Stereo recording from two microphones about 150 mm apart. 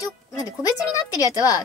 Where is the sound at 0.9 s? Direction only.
25° left (ahead or behind).